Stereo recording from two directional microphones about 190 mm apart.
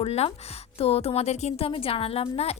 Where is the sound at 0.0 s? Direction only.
30° left (ahead or behind).